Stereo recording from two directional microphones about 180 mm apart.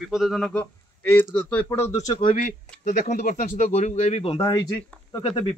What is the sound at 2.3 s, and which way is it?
Speech, 50° left (ahead or behind).